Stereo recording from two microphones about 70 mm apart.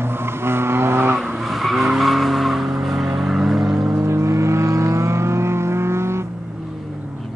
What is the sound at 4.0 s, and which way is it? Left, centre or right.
Vehicle, right.